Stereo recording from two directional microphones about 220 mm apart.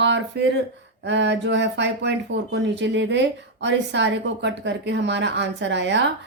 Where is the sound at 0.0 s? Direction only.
55° right (ahead or behind).